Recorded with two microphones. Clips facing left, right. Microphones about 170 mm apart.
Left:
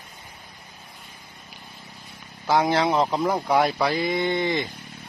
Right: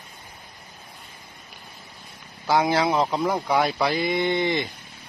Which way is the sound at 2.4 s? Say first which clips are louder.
Even; 5° right (ahead or behind).